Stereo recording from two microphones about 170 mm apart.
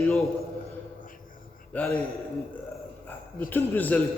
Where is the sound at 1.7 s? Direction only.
5° left (ahead or behind).